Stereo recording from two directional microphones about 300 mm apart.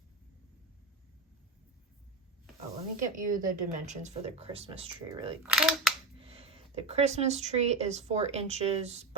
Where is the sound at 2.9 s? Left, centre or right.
Right.